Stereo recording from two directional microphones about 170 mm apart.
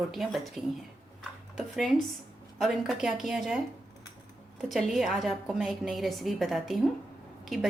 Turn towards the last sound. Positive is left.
turn(degrees=0)  # may be behind; listen again after turning